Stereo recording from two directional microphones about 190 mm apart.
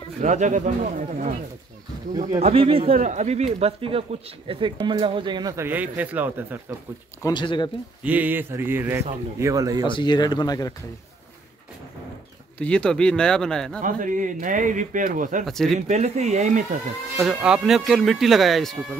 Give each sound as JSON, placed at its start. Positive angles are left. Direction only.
{"t": 0.2, "sound": "speech", "side_deg": -40}
{"t": 2.3, "sound": "speech", "side_deg": -30}
{"t": 7.2, "sound": "speech", "side_deg": 25}
{"t": 8.0, "sound": "speech", "side_deg": -10}
{"t": 9.8, "sound": "speech", "side_deg": 25}
{"t": 12.5, "sound": "speech", "side_deg": 5}
{"t": 13.7, "sound": "a man's voice", "side_deg": -45}
{"t": 15.4, "sound": "speech", "side_deg": 0}
{"t": 15.9, "sound": "speech", "side_deg": -35}
{"t": 17.2, "sound": "speech", "side_deg": -5}